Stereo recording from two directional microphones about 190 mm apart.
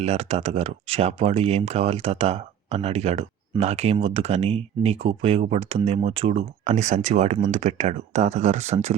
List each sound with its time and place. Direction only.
0.0 s speech: 35° right (ahead or behind)